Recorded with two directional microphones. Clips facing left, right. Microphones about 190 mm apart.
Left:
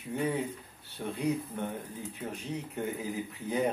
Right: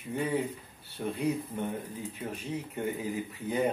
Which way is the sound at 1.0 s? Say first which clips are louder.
Right 3 dB; 5° right (ahead or behind).